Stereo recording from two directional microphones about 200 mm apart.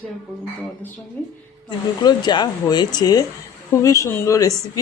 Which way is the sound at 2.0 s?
20° left (ahead or behind).